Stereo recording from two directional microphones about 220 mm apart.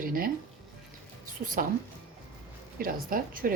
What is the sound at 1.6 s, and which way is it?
Speech, 40° right (ahead or behind).